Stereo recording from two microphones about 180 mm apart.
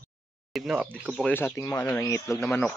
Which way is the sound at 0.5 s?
5° right (ahead or behind).